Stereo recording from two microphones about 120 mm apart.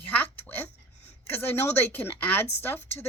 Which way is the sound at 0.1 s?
15° left (ahead or behind).